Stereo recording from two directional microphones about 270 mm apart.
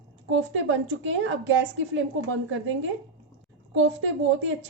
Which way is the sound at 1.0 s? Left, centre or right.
Right.